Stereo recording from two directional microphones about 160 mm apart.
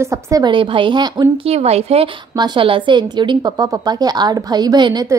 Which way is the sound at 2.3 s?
25° right (ahead or behind).